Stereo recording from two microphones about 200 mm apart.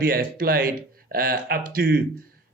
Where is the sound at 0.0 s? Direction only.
45° right (ahead or behind).